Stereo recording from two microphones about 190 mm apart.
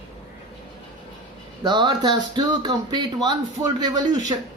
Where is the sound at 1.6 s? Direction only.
25° right (ahead or behind).